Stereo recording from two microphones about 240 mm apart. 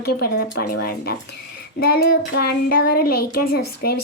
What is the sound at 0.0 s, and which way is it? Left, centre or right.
Speech, left.